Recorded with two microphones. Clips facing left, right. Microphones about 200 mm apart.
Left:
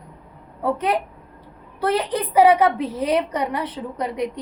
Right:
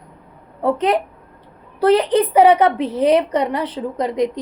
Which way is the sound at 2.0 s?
30° right (ahead or behind).